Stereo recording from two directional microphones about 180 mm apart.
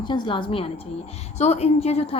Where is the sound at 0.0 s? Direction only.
25° left (ahead or behind).